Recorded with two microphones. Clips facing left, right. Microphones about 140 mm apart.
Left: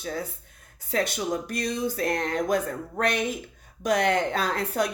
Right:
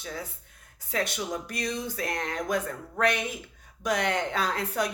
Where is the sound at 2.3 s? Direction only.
35° left (ahead or behind).